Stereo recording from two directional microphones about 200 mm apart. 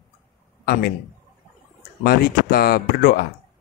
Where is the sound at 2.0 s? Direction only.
50° left (ahead or behind).